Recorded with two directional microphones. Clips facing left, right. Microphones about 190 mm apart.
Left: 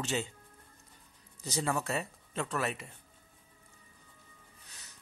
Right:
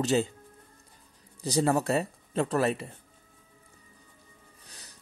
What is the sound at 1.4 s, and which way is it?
Speech, 35° right (ahead or behind).